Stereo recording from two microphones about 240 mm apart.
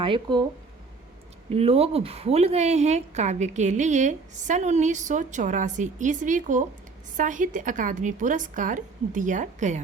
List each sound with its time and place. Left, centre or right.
0.0 s a woman's voice: centre
1.5 s a woman's voice: right